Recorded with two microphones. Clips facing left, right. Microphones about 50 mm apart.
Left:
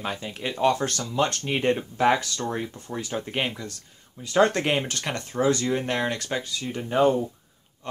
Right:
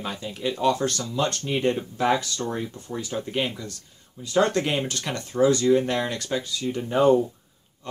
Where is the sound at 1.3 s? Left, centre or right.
Left.